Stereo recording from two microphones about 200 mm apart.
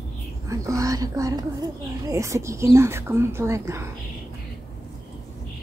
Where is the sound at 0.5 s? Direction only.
15° right (ahead or behind).